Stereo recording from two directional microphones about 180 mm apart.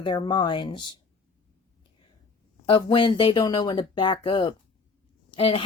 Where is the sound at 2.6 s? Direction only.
30° left (ahead or behind).